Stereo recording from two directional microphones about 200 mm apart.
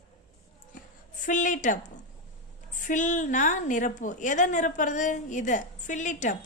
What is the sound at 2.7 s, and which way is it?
A woman's voice, 40° left (ahead or behind).